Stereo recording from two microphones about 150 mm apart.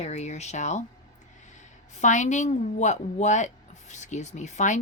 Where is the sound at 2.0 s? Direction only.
55° left (ahead or behind).